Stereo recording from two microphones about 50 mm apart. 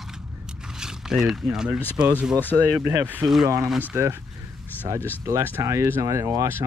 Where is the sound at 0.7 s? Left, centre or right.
Centre.